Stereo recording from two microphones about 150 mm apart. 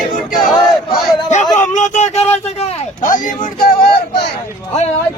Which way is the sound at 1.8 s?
50° left (ahead or behind).